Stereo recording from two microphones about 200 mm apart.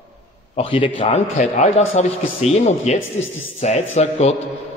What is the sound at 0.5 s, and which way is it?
A man's voice, 25° left (ahead or behind).